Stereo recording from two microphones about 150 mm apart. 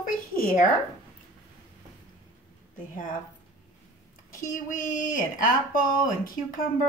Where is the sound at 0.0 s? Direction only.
65° left (ahead or behind).